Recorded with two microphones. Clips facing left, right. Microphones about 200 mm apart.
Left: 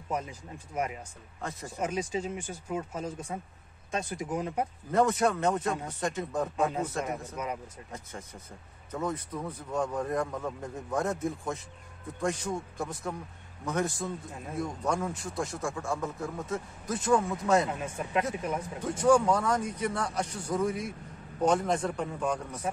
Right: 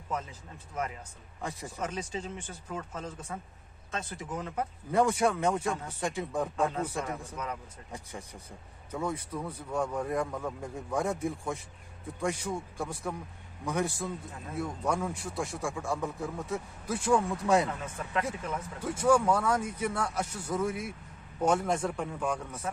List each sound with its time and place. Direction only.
0.1 s speech: 15° left (ahead or behind)
1.4 s speech: 15° right (ahead or behind)
1.8 s speech: 10° left (ahead or behind)
4.9 s speech: 10° right (ahead or behind)
6.5 s speech: 15° left (ahead or behind)
7.9 s a man's voice: 15° right (ahead or behind)
17.6 s speech: 15° left (ahead or behind)
18.9 s speech: 5° right (ahead or behind)